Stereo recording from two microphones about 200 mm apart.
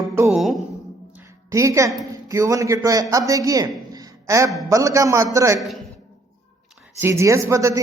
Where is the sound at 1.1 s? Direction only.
15° right (ahead or behind).